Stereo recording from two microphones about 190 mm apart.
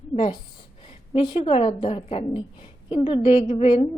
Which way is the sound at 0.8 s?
25° left (ahead or behind).